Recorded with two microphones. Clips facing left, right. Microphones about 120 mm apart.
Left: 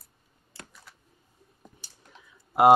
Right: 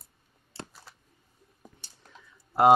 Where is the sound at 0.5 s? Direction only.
30° right (ahead or behind).